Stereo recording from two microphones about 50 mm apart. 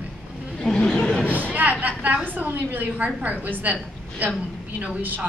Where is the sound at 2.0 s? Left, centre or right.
Right.